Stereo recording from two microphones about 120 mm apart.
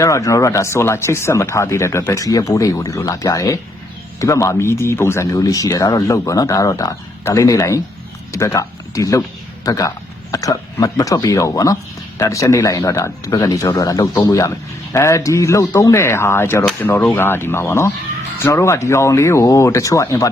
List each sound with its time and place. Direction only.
0.0 s speech: 25° left (ahead or behind)